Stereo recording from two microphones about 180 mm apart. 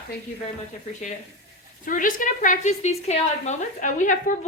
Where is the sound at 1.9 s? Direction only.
50° left (ahead or behind).